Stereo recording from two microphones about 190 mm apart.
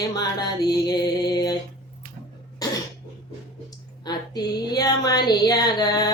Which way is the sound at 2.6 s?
20° left (ahead or behind).